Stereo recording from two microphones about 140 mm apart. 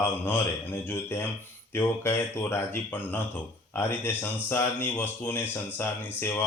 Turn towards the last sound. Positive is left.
turn(degrees=15)  # may be behind; listen again after turning